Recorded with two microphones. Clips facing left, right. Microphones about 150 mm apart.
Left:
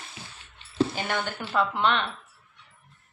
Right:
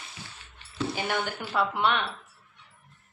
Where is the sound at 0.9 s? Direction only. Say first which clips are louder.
Even; 10° right (ahead or behind).